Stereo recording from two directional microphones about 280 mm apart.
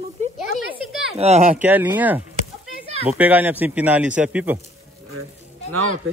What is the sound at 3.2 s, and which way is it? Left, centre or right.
A man's voice, centre.